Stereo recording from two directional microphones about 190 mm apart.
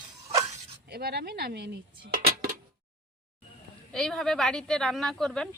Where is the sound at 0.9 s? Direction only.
55° right (ahead or behind).